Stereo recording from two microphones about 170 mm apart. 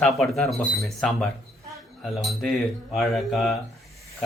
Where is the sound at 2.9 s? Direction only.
Centre (ahead or behind).